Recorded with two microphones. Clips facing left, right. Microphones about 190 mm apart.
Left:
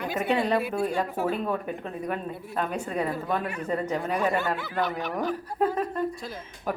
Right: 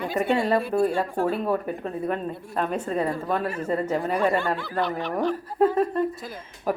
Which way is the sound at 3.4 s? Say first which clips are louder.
Right 4 dB; 40° right (ahead or behind).